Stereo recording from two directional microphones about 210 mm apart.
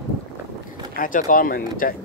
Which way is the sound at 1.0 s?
40° left (ahead or behind).